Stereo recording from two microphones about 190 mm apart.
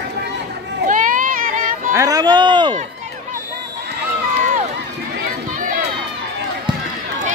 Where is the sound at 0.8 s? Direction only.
45° right (ahead or behind).